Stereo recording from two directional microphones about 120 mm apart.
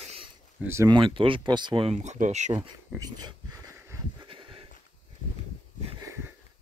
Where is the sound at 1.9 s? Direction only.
75° right (ahead or behind).